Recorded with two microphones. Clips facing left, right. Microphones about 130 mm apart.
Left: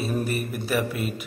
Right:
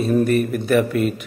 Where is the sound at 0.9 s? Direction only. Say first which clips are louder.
Right 10 dB; 50° right (ahead or behind).